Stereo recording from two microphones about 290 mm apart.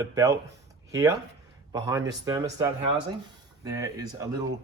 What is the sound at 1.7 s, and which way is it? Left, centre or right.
Speech, centre.